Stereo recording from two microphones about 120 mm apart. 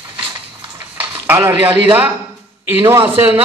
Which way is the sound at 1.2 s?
15° right (ahead or behind).